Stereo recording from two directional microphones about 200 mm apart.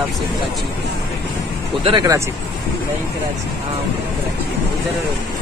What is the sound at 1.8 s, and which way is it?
Speech, 25° right (ahead or behind).